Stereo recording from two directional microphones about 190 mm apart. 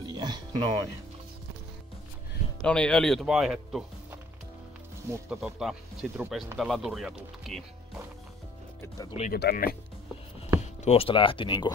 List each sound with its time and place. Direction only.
0.0 s music: 20° right (ahead or behind)
2.6 s speech: 5° left (ahead or behind)
5.3 s speech: centre (ahead or behind)
8.8 s speech: 20° left (ahead or behind)
9.3 s speech: 55° left (ahead or behind)
10.6 s speech: 35° left (ahead or behind)